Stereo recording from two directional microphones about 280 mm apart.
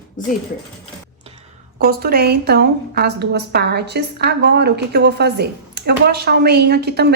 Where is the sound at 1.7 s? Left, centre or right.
Right.